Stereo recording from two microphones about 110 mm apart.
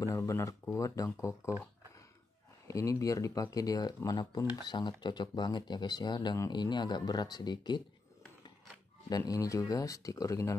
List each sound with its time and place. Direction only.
0.0 s speech: 30° left (ahead or behind)
2.7 s speech: 30° left (ahead or behind)
9.1 s speech: 35° left (ahead or behind)